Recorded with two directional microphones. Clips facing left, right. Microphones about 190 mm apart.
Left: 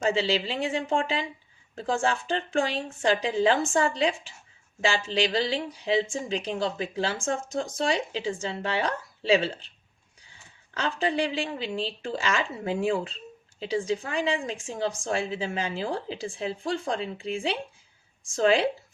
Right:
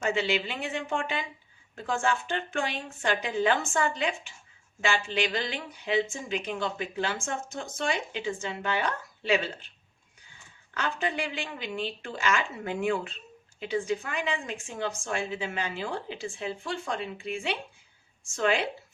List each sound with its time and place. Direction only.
0.0 s speech: 30° left (ahead or behind)
10.8 s speech: 35° left (ahead or behind)